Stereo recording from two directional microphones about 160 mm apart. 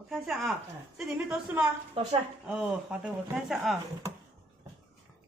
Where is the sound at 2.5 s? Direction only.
5° right (ahead or behind).